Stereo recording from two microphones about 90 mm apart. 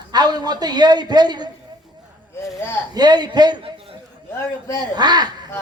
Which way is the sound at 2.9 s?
50° right (ahead or behind).